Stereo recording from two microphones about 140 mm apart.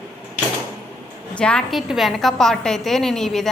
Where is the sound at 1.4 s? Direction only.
5° left (ahead or behind).